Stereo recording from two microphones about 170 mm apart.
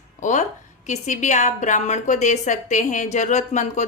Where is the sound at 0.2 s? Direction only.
45° left (ahead or behind).